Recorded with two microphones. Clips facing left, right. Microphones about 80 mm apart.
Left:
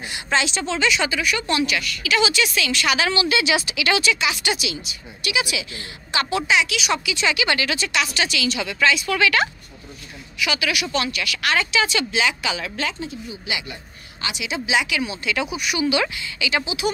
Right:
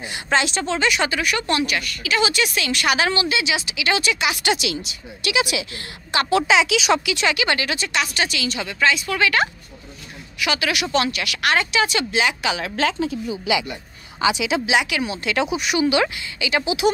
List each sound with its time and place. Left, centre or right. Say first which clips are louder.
0.1 s a woman's voice: right 2 dB; right
1.6 s a woman's voice: even; right
3.3 s speech: left 2 dB; centre
4.0 s speech: even; right
7.4 s speech: even; right
10.4 s speech: right 1 dB; right
11.5 s a woman's voice: even; right
12.7 s speech: right 6 dB; right
14.5 s a woman's voice: right 2 dB; right
16.6 s speech: right 5 dB; right